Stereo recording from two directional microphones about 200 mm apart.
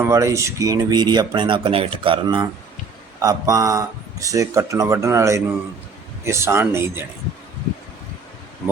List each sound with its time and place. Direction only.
0.0 s speech: 15° right (ahead or behind)